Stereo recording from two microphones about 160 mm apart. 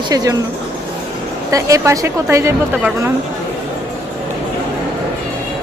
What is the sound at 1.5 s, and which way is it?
A woman's voice, 20° right (ahead or behind).